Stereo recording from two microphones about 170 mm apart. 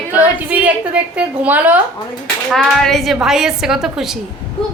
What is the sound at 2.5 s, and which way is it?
A woman's voice, centre (ahead or behind).